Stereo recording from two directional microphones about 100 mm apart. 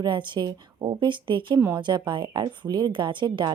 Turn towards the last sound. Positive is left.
turn(degrees=-50)  # may be behind; listen again after turning